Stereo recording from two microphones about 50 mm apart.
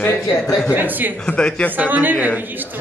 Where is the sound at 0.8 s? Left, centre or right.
Right.